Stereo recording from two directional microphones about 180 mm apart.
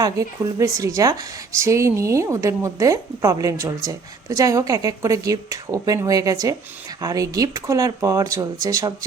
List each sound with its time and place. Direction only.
0.0 s a woman's voice: 20° right (ahead or behind)